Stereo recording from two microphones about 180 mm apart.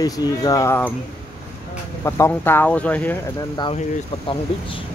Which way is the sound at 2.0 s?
15° left (ahead or behind).